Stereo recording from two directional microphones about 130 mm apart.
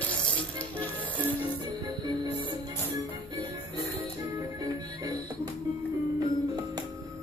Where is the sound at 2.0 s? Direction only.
40° right (ahead or behind).